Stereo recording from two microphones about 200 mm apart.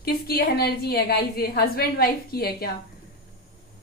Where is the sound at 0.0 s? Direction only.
50° left (ahead or behind).